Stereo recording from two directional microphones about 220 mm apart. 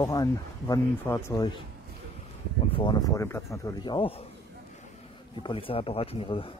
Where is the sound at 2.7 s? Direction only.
20° left (ahead or behind).